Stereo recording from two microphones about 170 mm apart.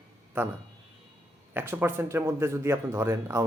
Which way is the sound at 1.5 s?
10° right (ahead or behind).